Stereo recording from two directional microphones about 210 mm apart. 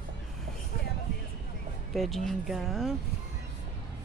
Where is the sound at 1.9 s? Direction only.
Centre (ahead or behind).